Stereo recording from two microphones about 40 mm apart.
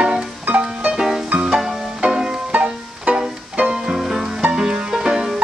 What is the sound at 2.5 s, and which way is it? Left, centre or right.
Music, right.